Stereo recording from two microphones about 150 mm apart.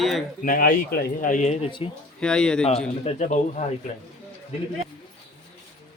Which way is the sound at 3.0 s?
50° left (ahead or behind).